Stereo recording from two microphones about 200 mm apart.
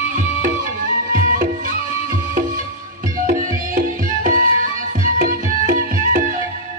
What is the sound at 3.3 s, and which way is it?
Music, 40° right (ahead or behind).